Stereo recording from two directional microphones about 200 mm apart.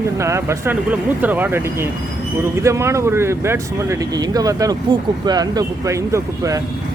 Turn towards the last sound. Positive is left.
turn(degrees=-15)  # may be behind; listen again after turning